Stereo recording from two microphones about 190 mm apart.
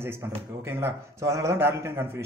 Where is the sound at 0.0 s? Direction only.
10° right (ahead or behind).